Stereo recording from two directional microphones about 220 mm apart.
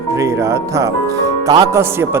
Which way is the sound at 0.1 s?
10° right (ahead or behind).